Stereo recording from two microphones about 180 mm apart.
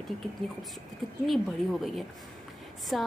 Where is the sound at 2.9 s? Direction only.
Centre (ahead or behind).